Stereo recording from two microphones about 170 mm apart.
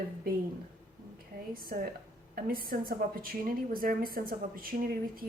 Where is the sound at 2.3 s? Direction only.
55° right (ahead or behind).